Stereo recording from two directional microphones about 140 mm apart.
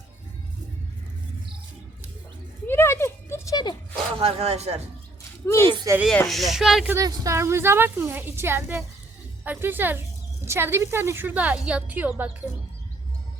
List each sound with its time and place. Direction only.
2.6 s a sound: 15° left (ahead or behind)
3.9 s speech: 40° right (ahead or behind)
6.1 s speech: centre (ahead or behind)
6.9 s a woman's voice: 25° right (ahead or behind)